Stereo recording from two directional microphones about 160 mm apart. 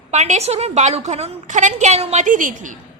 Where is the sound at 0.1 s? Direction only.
45° right (ahead or behind).